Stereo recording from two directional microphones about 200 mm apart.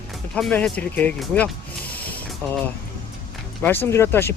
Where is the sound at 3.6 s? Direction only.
10° left (ahead or behind).